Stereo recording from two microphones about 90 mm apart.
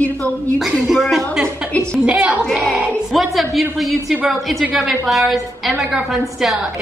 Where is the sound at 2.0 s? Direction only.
10° right (ahead or behind).